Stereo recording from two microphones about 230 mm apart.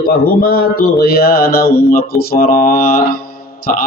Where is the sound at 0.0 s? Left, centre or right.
Left.